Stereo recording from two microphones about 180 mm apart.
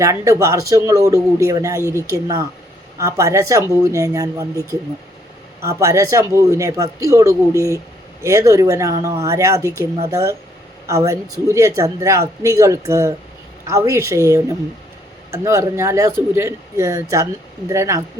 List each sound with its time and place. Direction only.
0.0 s speech: 15° right (ahead or behind)